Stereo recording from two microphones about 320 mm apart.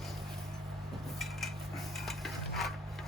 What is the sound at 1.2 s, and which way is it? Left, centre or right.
Cutlery, centre.